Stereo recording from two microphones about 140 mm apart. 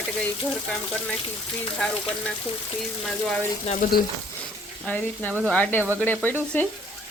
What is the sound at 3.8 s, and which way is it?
Frying, 70° left (ahead or behind).